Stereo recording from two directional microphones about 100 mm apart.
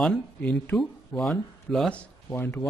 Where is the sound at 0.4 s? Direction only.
15° left (ahead or behind).